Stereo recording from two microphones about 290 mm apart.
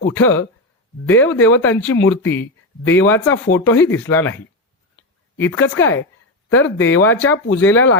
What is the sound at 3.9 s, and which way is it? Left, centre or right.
Speech, centre.